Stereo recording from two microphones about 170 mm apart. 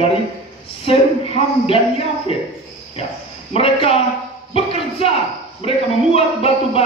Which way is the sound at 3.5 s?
35° left (ahead or behind).